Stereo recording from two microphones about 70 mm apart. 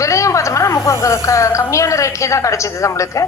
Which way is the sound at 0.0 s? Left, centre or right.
Left.